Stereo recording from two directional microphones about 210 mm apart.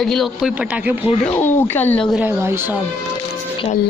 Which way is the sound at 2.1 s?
5° right (ahead or behind).